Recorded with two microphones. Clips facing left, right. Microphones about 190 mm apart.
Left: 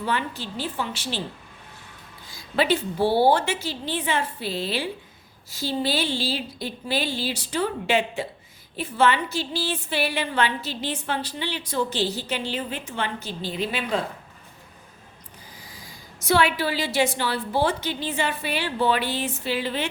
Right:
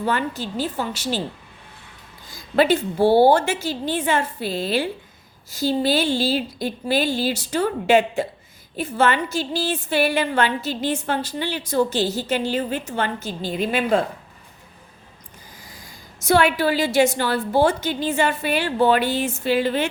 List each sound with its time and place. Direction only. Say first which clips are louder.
0.0 s a woman's voice: right 4 dB; 45° right (ahead or behind)
2.3 s a woman's voice: right 5 dB; 45° right (ahead or behind)
16.2 s a woman's voice: right 4 dB; 50° right (ahead or behind)